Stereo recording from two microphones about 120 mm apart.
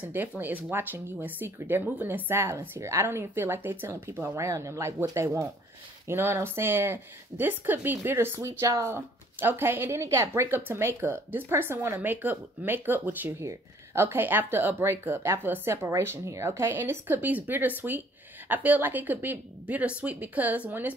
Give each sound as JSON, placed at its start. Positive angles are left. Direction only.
{"t": 0.0, "sound": "a woman's voice", "side_deg": -15}